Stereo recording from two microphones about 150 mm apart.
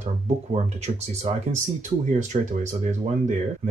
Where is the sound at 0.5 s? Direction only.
45° right (ahead or behind).